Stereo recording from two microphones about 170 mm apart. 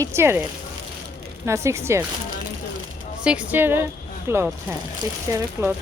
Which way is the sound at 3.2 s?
10° right (ahead or behind).